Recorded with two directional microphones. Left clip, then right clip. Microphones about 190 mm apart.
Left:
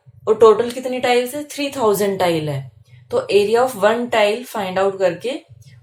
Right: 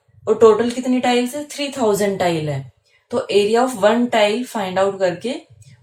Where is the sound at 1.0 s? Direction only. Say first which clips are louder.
Left 3 dB; 35° left (ahead or behind).